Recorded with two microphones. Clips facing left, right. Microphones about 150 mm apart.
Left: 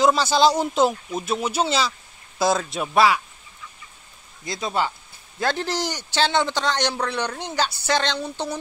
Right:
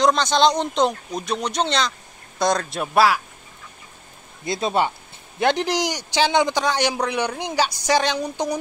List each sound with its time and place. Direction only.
0.0 s speech: 5° left (ahead or behind)
4.5 s a man's voice: 25° right (ahead or behind)